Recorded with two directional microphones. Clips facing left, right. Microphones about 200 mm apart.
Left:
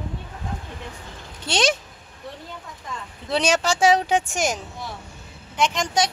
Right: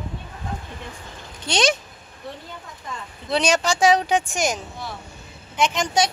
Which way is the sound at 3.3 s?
5° left (ahead or behind).